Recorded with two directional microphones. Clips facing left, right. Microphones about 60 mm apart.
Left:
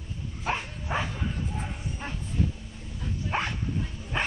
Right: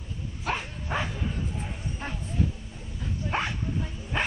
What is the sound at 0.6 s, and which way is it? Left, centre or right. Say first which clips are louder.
Bow-wow: even; centre.